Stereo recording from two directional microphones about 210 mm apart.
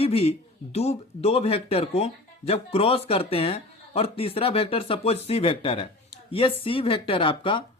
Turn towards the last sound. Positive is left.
turn(degrees=25)  # may be behind; listen again after turning